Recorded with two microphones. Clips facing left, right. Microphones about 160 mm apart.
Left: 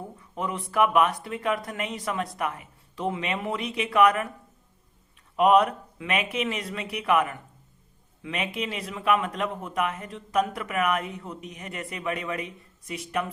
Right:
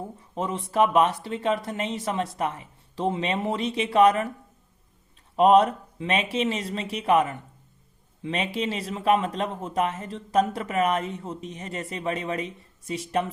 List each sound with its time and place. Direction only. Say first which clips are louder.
0.2 s speech: right 1 dB; 30° right (ahead or behind)
5.4 s speech: right 2 dB; 30° right (ahead or behind)